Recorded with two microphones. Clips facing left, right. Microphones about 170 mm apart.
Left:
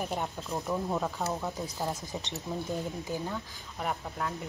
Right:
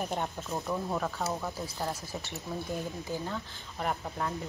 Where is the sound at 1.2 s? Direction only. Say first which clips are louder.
Left 1 dB; centre (ahead or behind).